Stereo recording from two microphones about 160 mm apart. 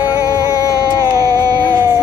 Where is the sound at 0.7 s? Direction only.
25° right (ahead or behind).